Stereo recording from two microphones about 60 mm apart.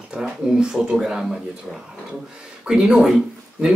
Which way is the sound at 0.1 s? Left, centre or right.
Centre.